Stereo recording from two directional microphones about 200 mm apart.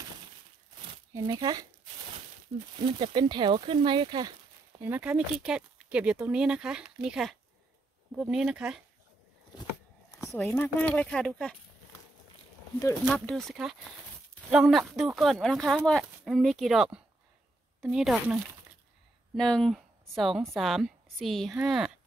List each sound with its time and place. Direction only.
1.1 s speech: 20° right (ahead or behind)
2.8 s speech: 25° right (ahead or behind)
4.8 s speech: 10° right (ahead or behind)
10.2 s speech: centre (ahead or behind)
13.1 s a woman's voice: 5° left (ahead or behind)